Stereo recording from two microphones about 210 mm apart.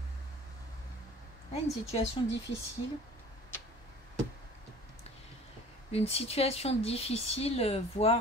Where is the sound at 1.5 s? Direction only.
30° left (ahead or behind).